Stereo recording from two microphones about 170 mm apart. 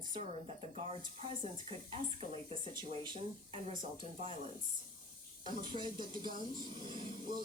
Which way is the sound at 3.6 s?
45° right (ahead or behind).